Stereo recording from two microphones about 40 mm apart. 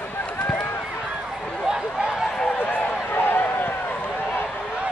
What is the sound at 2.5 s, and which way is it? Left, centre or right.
Run, left.